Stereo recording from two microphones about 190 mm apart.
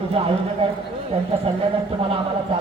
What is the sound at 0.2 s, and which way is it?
Speech, 30° right (ahead or behind).